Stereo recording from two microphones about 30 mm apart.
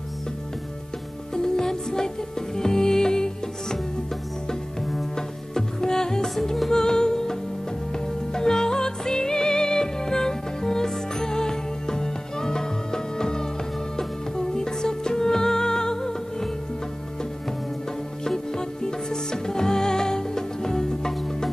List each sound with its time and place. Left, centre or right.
1.3 s music: centre
5.1 s music: centre
18.2 s music: centre